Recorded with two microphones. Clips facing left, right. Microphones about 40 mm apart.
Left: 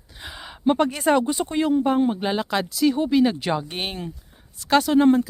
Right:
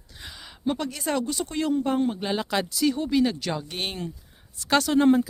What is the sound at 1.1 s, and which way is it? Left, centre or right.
Speech, left.